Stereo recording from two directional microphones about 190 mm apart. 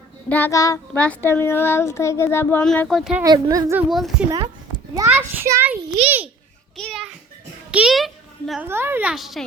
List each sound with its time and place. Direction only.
0.3 s speech: 10° left (ahead or behind)
3.2 s a woman's voice: 20° right (ahead or behind)
3.8 s a woman's voice: centre (ahead or behind)
4.9 s a woman's voice: 10° right (ahead or behind)
6.7 s a woman's voice: centre (ahead or behind)
8.6 s a woman's voice: 10° right (ahead or behind)